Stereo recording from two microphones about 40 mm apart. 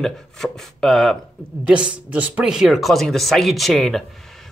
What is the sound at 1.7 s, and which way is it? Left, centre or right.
Speech, right.